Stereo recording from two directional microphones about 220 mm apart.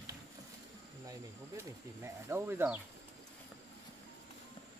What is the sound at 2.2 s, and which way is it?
Speech, 10° right (ahead or behind).